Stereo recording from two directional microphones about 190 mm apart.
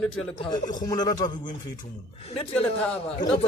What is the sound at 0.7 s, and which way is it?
Speech, 20° left (ahead or behind).